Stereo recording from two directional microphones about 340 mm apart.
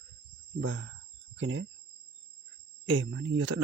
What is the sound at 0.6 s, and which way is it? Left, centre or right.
Speech, right.